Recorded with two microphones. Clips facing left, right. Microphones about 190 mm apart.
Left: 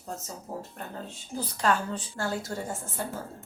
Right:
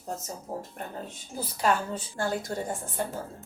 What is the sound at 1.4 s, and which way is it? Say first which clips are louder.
Speech: right 1 dB; 10° right (ahead or behind).